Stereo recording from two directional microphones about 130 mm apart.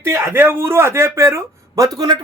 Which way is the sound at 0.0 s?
20° right (ahead or behind).